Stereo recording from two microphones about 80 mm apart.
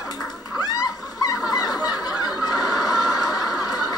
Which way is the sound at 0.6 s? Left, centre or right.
Left.